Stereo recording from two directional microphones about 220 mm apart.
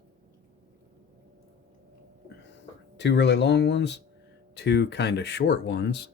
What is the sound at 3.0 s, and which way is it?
Speech, 50° left (ahead or behind).